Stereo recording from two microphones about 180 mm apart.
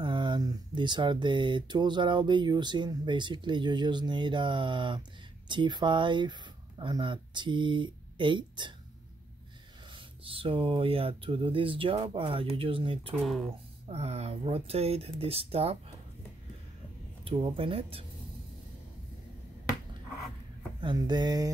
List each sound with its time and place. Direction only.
0.0 s speech: 25° right (ahead or behind)
9.8 s speech: 30° right (ahead or behind)
17.2 s speech: 30° right (ahead or behind)
20.8 s speech: 25° right (ahead or behind)